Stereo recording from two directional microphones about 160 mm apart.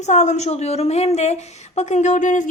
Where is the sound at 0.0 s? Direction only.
45° left (ahead or behind).